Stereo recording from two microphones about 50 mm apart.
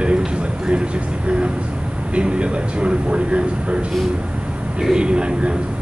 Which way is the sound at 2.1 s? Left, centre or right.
Right.